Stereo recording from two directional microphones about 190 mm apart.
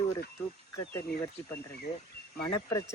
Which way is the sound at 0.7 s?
15° left (ahead or behind).